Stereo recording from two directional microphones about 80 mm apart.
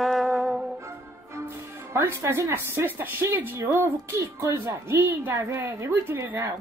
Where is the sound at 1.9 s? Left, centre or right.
Right.